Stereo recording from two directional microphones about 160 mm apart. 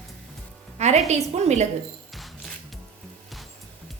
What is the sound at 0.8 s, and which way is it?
Speech, 45° right (ahead or behind).